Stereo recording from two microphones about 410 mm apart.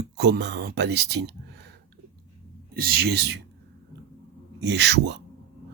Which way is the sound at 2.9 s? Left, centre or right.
Right.